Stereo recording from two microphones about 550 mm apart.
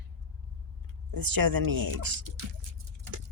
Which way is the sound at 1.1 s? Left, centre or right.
Right.